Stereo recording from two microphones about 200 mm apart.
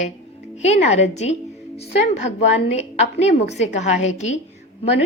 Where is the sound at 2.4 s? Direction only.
35° left (ahead or behind).